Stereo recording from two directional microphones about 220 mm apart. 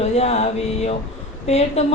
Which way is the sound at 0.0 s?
30° left (ahead or behind).